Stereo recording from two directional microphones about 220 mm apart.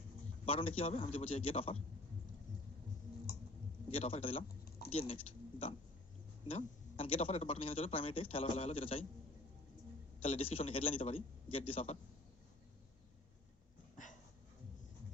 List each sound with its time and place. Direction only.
0.4 s speech: 25° left (ahead or behind)
3.8 s speech: 25° left (ahead or behind)
10.2 s speech: 25° left (ahead or behind)
13.9 s a sound: 35° left (ahead or behind)